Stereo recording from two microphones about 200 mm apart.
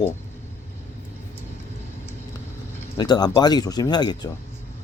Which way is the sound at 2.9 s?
20° left (ahead or behind).